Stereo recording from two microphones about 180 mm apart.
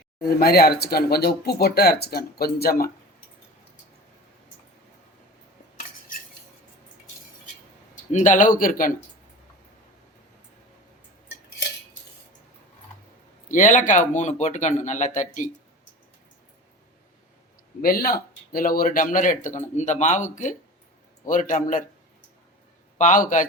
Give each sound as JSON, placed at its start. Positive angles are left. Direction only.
{"t": 0.2, "sound": "speech", "side_deg": 60}
{"t": 8.1, "sound": "speech", "side_deg": 45}
{"t": 13.5, "sound": "speech", "side_deg": 45}
{"t": 17.8, "sound": "speech", "side_deg": 55}
{"t": 23.0, "sound": "speech", "side_deg": 45}